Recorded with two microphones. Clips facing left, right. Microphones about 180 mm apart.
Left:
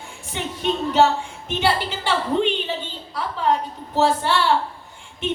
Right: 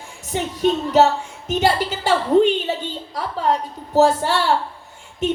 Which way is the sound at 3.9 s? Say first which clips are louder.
Right 4 dB; 40° right (ahead or behind).